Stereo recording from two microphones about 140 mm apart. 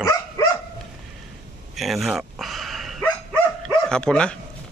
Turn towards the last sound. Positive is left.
turn(degrees=5)  # may be behind; listen again after turning